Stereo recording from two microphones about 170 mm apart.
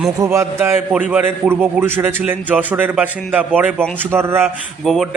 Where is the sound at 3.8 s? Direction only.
10° left (ahead or behind).